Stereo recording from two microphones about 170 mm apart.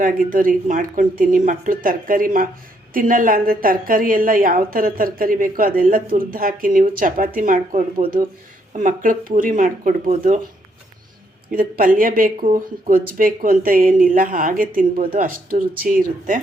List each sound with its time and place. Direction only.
0.0 s speech: 55° right (ahead or behind)
11.5 s speech: 55° right (ahead or behind)